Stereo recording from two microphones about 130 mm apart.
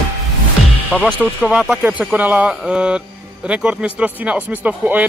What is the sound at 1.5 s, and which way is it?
A woman's voice, 5° right (ahead or behind).